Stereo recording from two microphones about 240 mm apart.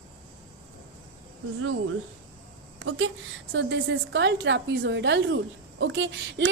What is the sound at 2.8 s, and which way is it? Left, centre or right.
Speech, right.